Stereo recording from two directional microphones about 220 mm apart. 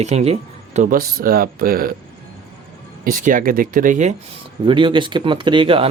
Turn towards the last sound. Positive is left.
turn(degrees=-25)  # may be behind; listen again after turning